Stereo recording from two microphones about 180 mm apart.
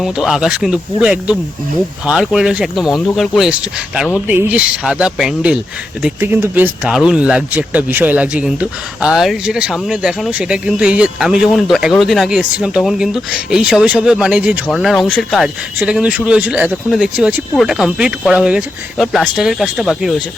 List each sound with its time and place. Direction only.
0.0 s speech: centre (ahead or behind)